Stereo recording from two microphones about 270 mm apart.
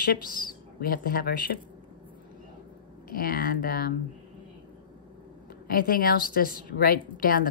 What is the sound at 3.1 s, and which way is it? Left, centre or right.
Speech, left.